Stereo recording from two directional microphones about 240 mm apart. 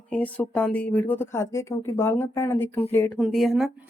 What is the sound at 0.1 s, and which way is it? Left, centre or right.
Speech, centre.